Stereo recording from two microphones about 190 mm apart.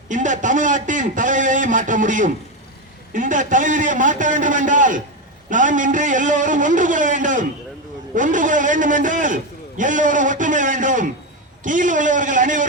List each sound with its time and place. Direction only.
0.1 s a man's voice: 40° right (ahead or behind)